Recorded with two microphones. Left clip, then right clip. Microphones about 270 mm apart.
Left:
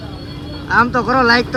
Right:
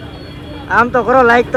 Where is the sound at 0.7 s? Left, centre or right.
Centre.